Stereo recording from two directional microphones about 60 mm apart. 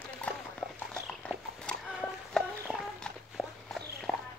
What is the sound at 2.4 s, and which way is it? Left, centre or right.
Music, centre.